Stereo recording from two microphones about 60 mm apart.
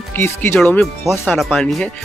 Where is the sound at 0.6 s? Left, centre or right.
Centre.